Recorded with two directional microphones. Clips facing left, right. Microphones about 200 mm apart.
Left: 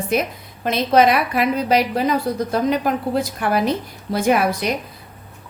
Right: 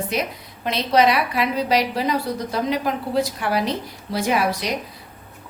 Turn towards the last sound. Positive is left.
turn(degrees=50)  # may be behind; listen again after turning